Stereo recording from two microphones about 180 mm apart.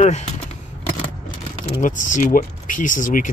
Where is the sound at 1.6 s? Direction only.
45° left (ahead or behind).